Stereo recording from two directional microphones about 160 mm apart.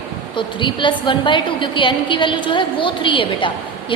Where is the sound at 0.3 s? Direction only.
30° left (ahead or behind).